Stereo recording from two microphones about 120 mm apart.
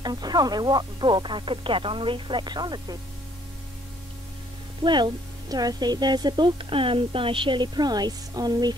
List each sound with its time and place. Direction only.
0.0 s a woman's voice: 35° right (ahead or behind)
4.8 s a woman's voice: 40° right (ahead or behind)